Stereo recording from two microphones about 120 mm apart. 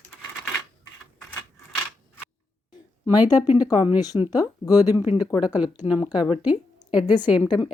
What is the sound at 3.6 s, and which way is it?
Speech, 35° left (ahead or behind).